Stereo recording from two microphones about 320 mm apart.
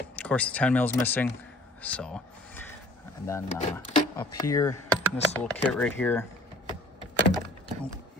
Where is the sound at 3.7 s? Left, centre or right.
Centre.